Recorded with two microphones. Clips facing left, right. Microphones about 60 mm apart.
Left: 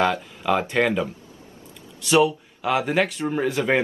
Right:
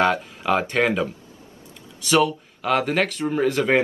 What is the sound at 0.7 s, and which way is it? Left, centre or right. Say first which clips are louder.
Speech: even; centre.